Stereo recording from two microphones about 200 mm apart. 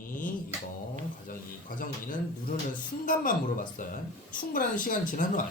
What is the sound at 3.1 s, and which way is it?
Speech, 45° left (ahead or behind).